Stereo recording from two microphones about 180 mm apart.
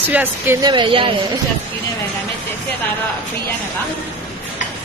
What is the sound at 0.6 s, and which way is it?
Speech, 25° right (ahead or behind).